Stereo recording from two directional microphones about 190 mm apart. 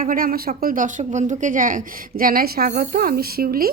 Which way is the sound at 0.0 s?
45° right (ahead or behind).